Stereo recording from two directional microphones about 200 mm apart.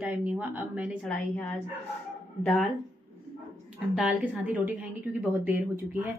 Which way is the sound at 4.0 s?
5° right (ahead or behind).